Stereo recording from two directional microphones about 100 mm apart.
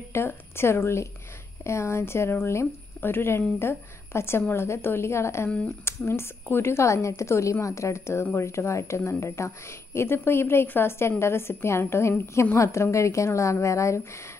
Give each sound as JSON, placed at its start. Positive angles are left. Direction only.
{"t": 0.1, "sound": "speech", "side_deg": 25}